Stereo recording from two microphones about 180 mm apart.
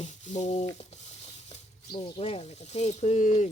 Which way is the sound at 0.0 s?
40° left (ahead or behind).